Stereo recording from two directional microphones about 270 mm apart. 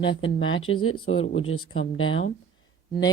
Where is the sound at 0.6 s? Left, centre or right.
Left.